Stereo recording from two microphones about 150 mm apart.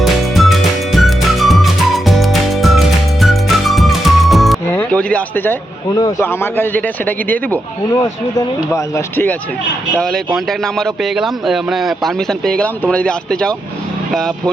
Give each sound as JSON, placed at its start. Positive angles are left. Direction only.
{"t": 0.0, "sound": "music", "side_deg": 0}
{"t": 4.7, "sound": "speech", "side_deg": 10}
{"t": 5.9, "sound": "speech", "side_deg": 25}
{"t": 7.9, "sound": "speech", "side_deg": 25}
{"t": 10.0, "sound": "speech", "side_deg": 5}